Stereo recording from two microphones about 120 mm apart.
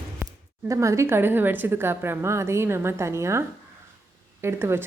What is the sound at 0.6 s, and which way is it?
A woman's voice, 25° right (ahead or behind).